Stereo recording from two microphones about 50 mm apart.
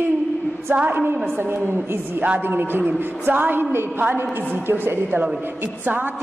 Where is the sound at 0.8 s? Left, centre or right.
Right.